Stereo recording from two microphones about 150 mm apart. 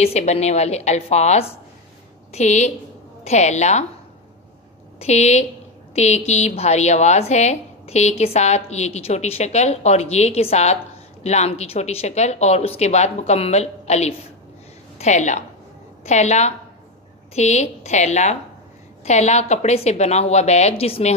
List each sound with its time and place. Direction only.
0.0 s a woman's voice: 45° left (ahead or behind)
4.9 s a woman's voice: 45° left (ahead or behind)